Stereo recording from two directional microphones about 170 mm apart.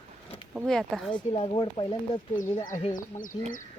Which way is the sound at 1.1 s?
30° left (ahead or behind).